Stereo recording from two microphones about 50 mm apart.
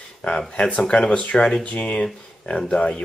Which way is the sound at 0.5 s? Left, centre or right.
Left.